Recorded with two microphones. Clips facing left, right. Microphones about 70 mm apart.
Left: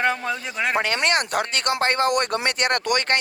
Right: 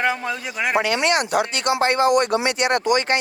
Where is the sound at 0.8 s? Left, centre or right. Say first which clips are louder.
Right 4 dB; left.